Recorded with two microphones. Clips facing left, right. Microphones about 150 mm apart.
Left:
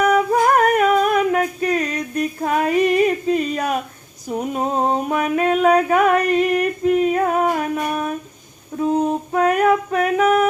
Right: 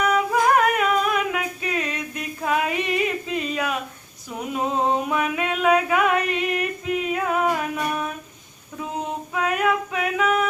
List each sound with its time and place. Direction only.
0.0 s singing: 45° left (ahead or behind)
4.3 s a sound: 40° left (ahead or behind)
8.8 s female singing: 45° left (ahead or behind)